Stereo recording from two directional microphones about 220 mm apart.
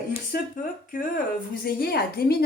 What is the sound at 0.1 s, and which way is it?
Speech, 40° left (ahead or behind).